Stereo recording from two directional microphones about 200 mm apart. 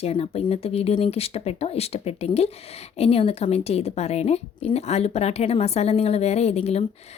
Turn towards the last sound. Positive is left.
turn(degrees=30)  # may be behind; listen again after turning